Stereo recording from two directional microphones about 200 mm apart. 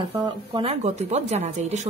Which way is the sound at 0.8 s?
35° right (ahead or behind).